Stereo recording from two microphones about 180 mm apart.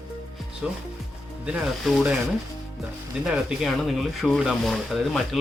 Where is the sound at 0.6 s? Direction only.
5° right (ahead or behind).